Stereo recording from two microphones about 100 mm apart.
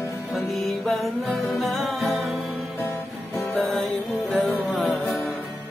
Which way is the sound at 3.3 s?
20° left (ahead or behind).